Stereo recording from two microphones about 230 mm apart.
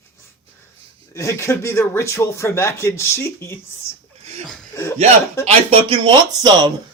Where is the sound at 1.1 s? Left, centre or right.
Centre.